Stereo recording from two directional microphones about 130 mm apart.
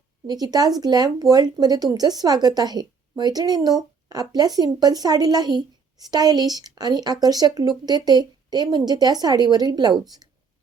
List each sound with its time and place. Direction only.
0.3 s speech: 30° right (ahead or behind)